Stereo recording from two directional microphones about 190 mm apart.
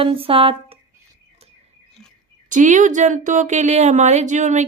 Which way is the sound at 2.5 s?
40° right (ahead or behind).